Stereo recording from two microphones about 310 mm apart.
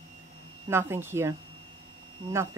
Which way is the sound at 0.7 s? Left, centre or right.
Centre.